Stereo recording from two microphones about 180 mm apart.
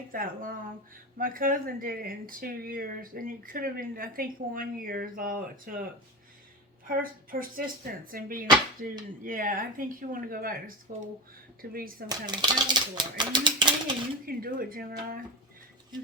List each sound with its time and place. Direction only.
0.1 s speech: 50° right (ahead or behind)
6.8 s speech: 50° right (ahead or behind)
12.0 s speech: 25° right (ahead or behind)
14.3 s speech: 55° right (ahead or behind)